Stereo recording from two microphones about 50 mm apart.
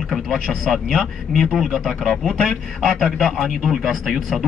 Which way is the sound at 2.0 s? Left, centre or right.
Centre.